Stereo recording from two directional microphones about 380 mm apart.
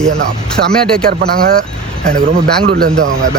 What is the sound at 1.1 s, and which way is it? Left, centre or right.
A man's voice, right.